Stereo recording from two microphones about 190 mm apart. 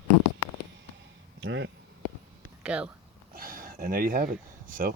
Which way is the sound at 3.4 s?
50° right (ahead or behind).